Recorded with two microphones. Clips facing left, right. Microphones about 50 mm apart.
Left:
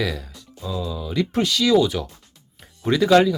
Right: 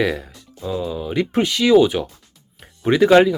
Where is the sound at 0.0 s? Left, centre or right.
Right.